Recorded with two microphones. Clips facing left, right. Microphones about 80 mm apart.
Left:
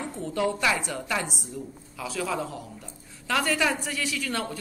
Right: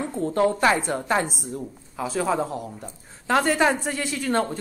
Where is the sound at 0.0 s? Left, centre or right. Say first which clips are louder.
Right 6 dB; right.